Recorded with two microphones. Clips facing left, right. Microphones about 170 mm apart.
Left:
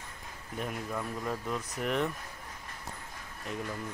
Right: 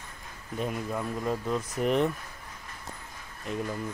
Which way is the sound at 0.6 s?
20° right (ahead or behind).